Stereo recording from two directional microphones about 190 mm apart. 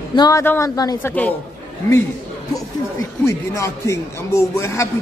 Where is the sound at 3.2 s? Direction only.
15° left (ahead or behind).